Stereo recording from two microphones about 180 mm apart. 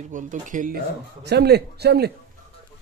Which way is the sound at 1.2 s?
65° right (ahead or behind).